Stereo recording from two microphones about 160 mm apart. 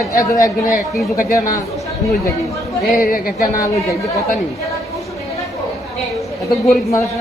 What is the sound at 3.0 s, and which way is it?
Speech, 60° left (ahead or behind).